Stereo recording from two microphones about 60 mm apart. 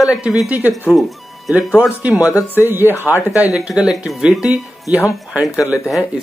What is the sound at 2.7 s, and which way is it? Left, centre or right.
Speech, right.